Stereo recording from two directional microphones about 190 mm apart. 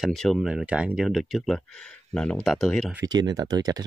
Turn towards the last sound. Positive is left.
turn(degrees=-20)  # may be behind; listen again after turning